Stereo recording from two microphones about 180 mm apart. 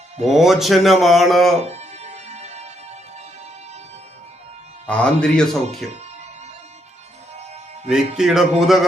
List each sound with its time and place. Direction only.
0.3 s speech: centre (ahead or behind)
1.6 s music: 35° right (ahead or behind)
4.9 s speech: 5° left (ahead or behind)
7.9 s speech: 5° right (ahead or behind)